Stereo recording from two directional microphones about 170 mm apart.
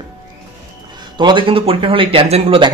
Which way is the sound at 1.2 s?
30° right (ahead or behind).